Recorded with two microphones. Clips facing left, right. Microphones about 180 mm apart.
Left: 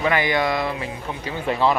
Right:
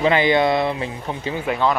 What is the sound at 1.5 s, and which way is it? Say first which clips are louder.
Speech: left 1 dB; centre (ahead or behind).